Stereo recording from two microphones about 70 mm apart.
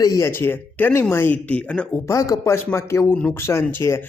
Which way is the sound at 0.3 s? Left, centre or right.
Left.